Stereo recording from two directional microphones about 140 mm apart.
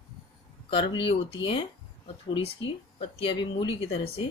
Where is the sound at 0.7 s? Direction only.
40° left (ahead or behind).